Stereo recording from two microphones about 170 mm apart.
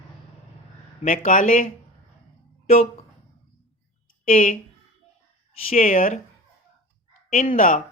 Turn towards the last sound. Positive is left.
turn(degrees=50)  # may be behind; listen again after turning